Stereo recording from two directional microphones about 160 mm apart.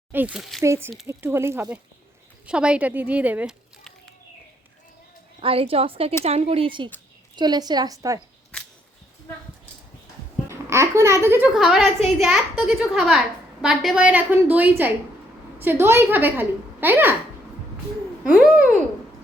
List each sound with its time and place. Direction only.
0.1 s a woman's voice: 10° right (ahead or behind)
0.6 s a woman's voice: 15° right (ahead or behind)
5.4 s a woman's voice: 35° right (ahead or behind)
8.5 s biting: 5° left (ahead or behind)
10.5 s a woman's voice: 15° right (ahead or behind)
18.2 s a woman's voice: 5° right (ahead or behind)